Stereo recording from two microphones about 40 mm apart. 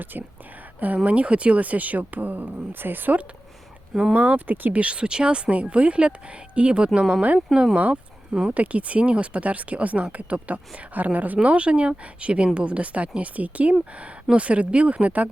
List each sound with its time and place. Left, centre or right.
0.0 s speech: right
1.0 s speech: right
4.1 s speech: right
4.7 s speech: right
5.5 s speech: right; by 7.8 s centre
7.8 s a sound: right
8.5 s speech: right
11.4 s speech: right